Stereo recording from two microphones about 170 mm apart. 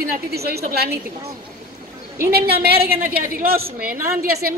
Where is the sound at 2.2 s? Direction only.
65° right (ahead or behind).